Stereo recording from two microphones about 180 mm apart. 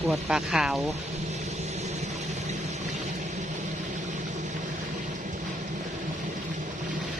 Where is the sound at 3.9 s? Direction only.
45° right (ahead or behind).